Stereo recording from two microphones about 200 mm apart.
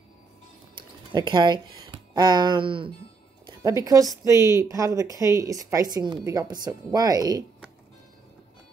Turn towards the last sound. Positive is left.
turn(degrees=-20)  # may be behind; listen again after turning